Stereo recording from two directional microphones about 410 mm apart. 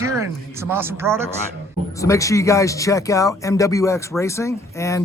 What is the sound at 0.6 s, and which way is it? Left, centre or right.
Speech, centre.